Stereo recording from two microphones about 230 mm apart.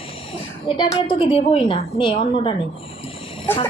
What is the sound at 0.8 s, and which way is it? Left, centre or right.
A woman's voice, centre.